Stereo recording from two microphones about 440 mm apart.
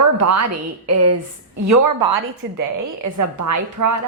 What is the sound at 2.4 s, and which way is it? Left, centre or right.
Speech, right.